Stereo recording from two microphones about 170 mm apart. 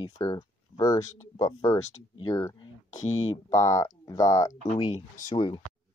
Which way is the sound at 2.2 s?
20° left (ahead or behind).